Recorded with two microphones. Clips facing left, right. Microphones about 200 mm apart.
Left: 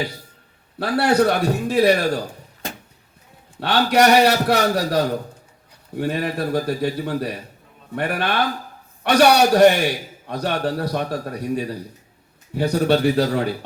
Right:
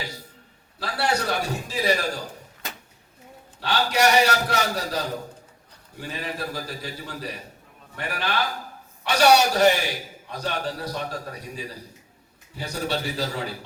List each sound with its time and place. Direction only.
0.8 s a man's voice: 60° left (ahead or behind)
3.6 s a man's voice: 60° left (ahead or behind)